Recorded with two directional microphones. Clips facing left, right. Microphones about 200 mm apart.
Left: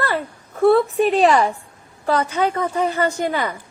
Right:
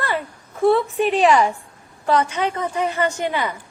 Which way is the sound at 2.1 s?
30° left (ahead or behind).